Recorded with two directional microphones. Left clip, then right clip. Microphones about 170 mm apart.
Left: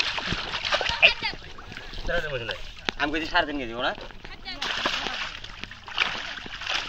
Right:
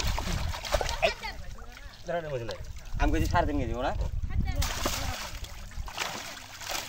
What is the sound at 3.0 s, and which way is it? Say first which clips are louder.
Speech: left 3 dB; 20° right (ahead or behind).